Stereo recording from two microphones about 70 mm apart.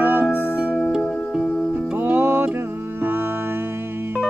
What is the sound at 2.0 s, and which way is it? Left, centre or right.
Music, right.